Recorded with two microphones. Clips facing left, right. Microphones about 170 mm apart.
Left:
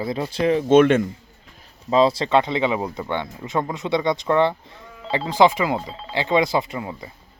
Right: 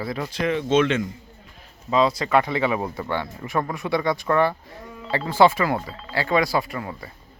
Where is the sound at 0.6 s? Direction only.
50° left (ahead or behind).